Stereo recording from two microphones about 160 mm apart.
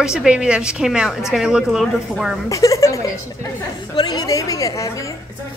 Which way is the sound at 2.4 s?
20° left (ahead or behind).